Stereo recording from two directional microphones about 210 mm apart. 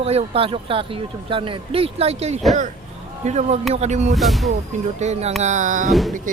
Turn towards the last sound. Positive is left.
turn(degrees=0)  # may be behind; listen again after turning